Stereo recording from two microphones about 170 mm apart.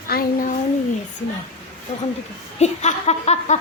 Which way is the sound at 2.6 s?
40° left (ahead or behind).